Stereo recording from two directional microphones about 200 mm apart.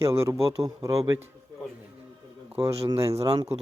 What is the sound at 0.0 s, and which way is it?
Speech, 15° right (ahead or behind).